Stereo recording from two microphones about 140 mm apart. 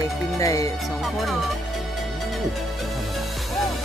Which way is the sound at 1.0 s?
Centre (ahead or behind).